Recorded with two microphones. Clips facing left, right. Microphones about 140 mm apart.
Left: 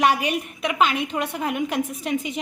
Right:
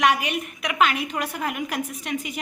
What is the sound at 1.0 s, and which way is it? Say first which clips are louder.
Speech: left 2 dB; 5° right (ahead or behind).